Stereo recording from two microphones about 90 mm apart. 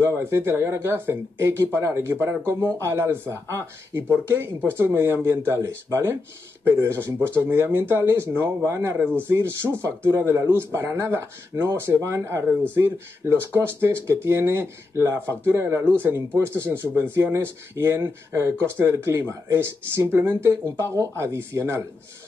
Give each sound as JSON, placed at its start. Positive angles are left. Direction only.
{"t": 0.0, "sound": "speech", "side_deg": -30}